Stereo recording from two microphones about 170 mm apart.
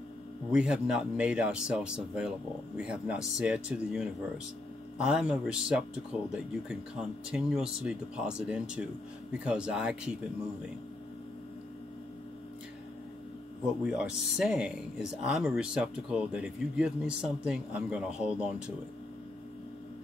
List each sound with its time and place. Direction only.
0.5 s speech: 5° right (ahead or behind)
13.8 s speech: 5° right (ahead or behind)